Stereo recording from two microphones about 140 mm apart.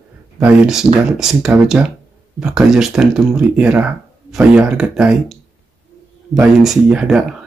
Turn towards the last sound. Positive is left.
turn(degrees=-5)  # may be behind; listen again after turning